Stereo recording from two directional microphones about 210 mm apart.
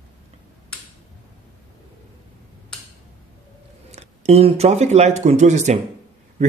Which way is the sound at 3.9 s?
30° right (ahead or behind).